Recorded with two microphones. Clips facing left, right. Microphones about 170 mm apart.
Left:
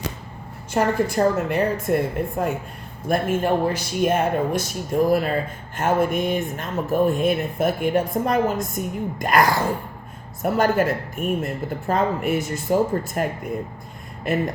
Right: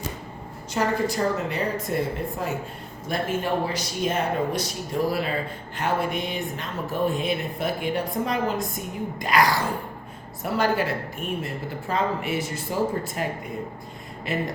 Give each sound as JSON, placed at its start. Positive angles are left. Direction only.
{"t": 0.7, "sound": "a woman's voice", "side_deg": 55}